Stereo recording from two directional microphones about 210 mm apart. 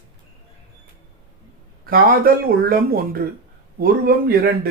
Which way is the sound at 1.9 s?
45° right (ahead or behind).